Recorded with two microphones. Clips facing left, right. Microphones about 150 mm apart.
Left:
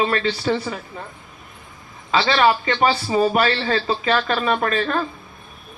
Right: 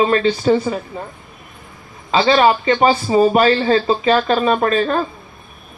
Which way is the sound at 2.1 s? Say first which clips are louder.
Right 4 dB; 20° right (ahead or behind).